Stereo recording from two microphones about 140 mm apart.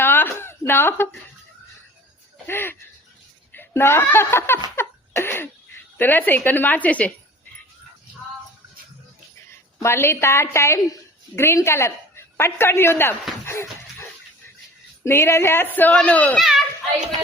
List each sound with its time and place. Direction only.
0.0 s a sound: 15° left (ahead or behind)
2.5 s a woman's voice: 15° left (ahead or behind)
4.8 s laughter: 15° left (ahead or behind)
6.0 s a woman's voice: 15° left (ahead or behind)
9.8 s a woman's voice: 15° left (ahead or behind)
13.4 s a sound: 15° left (ahead or behind)
15.0 s a woman's voice: 20° left (ahead or behind); by 16.6 s centre (ahead or behind)